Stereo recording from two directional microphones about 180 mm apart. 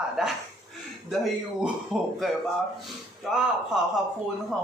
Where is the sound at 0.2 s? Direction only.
Centre (ahead or behind).